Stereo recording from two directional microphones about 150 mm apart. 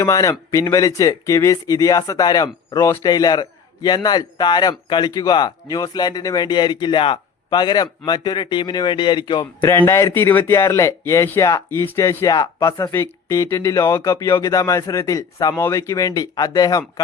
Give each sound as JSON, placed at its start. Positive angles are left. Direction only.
{"t": 0.0, "sound": "a man's voice", "side_deg": 20}
{"t": 9.6, "sound": "a man's voice", "side_deg": 15}